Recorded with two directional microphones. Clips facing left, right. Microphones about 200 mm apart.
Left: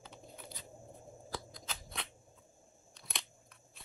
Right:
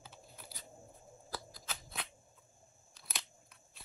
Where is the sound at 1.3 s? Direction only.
5° right (ahead or behind).